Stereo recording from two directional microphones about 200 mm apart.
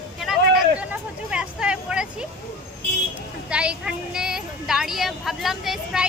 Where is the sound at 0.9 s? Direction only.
5° right (ahead or behind).